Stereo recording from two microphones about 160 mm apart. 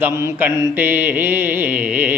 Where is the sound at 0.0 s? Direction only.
20° right (ahead or behind).